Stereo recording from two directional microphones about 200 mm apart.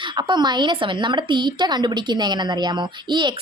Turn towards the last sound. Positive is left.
turn(degrees=-20)  # may be behind; listen again after turning